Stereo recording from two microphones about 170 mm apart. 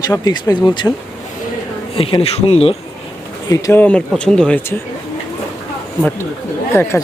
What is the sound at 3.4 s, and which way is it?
Speech, 20° left (ahead or behind).